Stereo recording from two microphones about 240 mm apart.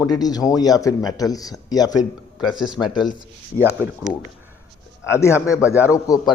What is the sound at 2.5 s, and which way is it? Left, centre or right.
Speech, centre.